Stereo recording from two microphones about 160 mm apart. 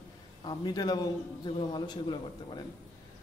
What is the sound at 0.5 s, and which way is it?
A man's voice, 25° left (ahead or behind).